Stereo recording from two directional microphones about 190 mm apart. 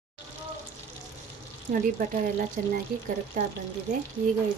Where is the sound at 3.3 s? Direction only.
45° right (ahead or behind).